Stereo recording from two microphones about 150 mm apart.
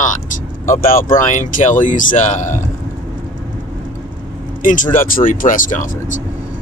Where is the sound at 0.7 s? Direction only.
70° left (ahead or behind).